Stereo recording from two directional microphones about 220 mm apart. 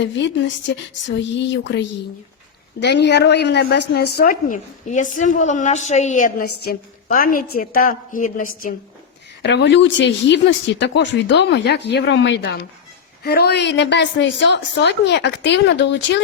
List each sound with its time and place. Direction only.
0.0 s a woman's voice: 55° left (ahead or behind); by 8.7 s 40° left (ahead or behind)
9.4 s speech: 50° left (ahead or behind)